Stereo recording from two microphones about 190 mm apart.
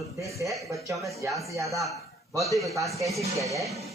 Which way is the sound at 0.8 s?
15° right (ahead or behind).